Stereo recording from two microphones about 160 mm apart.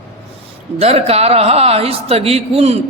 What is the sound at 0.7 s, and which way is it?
Speech, 40° right (ahead or behind).